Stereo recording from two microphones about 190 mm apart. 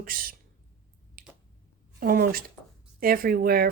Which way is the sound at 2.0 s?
50° right (ahead or behind).